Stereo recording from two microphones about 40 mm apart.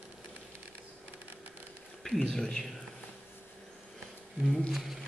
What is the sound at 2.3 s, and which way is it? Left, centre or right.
Speech, centre.